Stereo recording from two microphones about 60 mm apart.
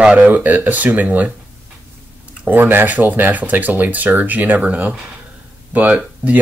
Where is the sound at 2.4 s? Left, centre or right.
Right.